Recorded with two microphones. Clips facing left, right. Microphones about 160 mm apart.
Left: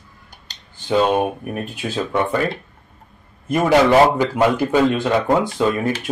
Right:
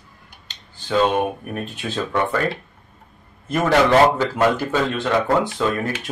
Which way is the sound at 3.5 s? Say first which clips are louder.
Left 2 dB; 10° left (ahead or behind).